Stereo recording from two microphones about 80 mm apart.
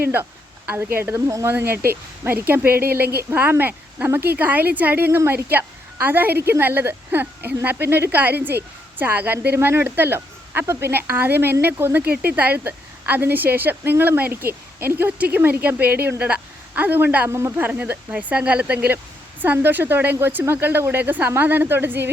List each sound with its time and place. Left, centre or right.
0.0 s speech: right
17.2 s speech: right
17.6 s speech: right